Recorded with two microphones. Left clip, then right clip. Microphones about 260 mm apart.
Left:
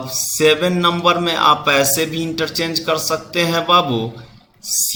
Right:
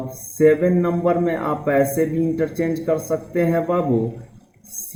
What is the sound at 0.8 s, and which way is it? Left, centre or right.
A man's voice, left.